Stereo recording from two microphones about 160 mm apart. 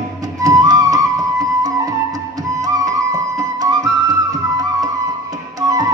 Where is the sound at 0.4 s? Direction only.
20° right (ahead or behind).